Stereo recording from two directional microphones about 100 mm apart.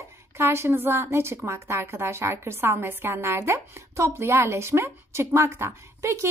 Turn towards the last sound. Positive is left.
turn(degrees=-30)  # may be behind; listen again after turning